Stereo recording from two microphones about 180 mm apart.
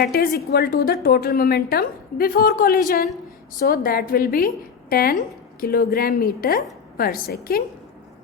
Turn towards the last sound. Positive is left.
turn(degrees=55)  # may be behind; listen again after turning